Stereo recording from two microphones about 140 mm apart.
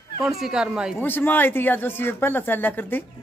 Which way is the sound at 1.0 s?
15° left (ahead or behind).